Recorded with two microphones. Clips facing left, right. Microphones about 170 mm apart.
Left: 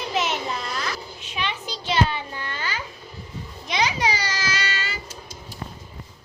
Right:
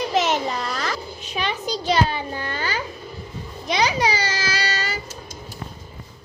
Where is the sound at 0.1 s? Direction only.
40° right (ahead or behind).